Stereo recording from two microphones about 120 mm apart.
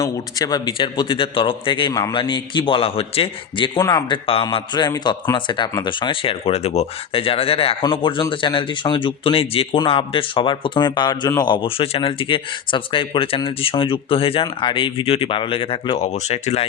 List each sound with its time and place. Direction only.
0.0 s speech: 30° left (ahead or behind)
1.9 s a man's voice: 30° left (ahead or behind)
2.1 s speech: 40° left (ahead or behind)
3.8 s a man's voice: 30° left (ahead or behind); by 16.0 s 50° left (ahead or behind)
16.1 s speech: 60° left (ahead or behind)